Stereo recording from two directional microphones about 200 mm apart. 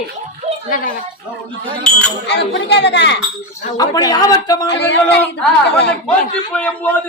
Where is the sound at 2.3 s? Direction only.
60° left (ahead or behind).